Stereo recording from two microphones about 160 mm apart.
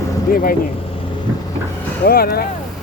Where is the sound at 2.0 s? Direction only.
70° left (ahead or behind).